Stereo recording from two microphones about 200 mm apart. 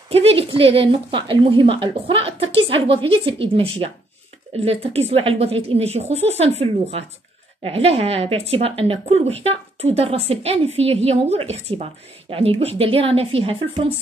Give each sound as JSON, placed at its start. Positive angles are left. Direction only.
{"t": 0.1, "sound": "a woman's voice", "side_deg": -30}